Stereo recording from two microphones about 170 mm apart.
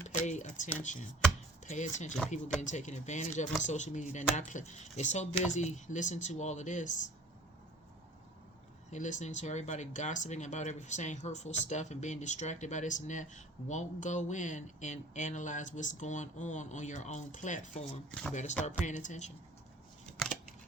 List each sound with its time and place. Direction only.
0.1 s speech: 45° left (ahead or behind)
8.9 s speech: 45° left (ahead or behind)
18.1 s speech: 5° left (ahead or behind)
18.9 s speech: 45° left (ahead or behind)